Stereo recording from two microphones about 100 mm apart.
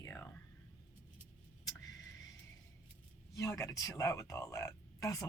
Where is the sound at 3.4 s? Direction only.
30° left (ahead or behind).